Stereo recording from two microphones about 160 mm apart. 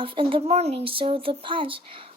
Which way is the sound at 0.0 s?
35° right (ahead or behind).